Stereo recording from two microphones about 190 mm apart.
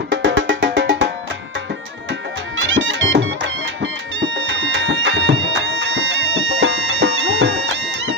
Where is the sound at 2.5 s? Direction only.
90° right.